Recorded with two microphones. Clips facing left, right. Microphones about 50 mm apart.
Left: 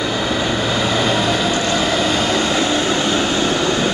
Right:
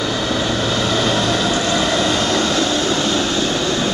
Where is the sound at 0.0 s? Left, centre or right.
Centre.